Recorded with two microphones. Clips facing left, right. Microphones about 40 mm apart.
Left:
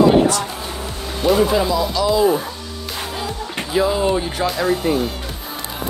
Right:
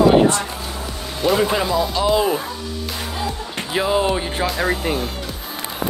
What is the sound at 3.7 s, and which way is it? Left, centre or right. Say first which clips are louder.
Speech: left 1 dB; right.